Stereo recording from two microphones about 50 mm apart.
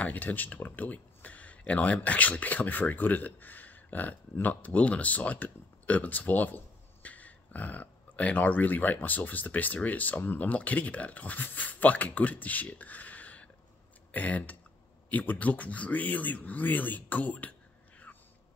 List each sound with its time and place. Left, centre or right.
0.0 s speech: left